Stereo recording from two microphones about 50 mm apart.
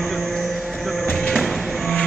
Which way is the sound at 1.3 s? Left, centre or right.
Centre.